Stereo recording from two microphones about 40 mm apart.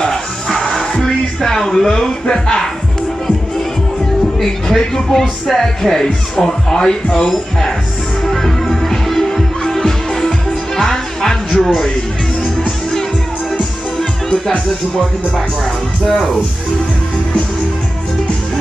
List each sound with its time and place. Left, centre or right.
0.0 s music: centre
1.0 s speech: centre
4.4 s speech: centre
8.3 s music: centre
11.6 s speech: centre